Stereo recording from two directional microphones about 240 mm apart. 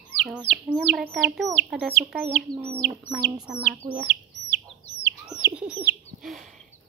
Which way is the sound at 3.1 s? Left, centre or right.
Centre.